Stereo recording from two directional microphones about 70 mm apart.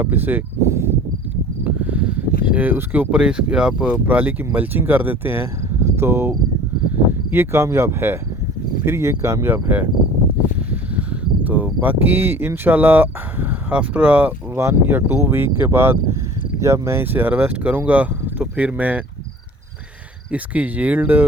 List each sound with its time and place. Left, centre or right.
0.0 s speech: right
0.6 s a sound: right
1.6 s speech: right
9.5 s speech: right
13.7 s speech: centre
14.5 s speech: right
20.3 s speech: right